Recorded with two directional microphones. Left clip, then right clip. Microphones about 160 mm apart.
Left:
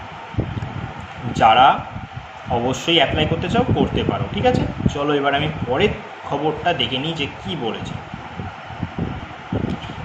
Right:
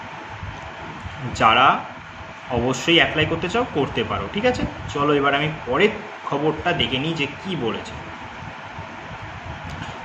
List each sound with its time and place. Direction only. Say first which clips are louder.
1.3 s speech: left 3 dB; 15° right (ahead or behind)